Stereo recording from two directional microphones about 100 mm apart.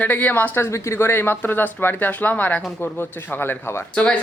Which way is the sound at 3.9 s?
10° left (ahead or behind).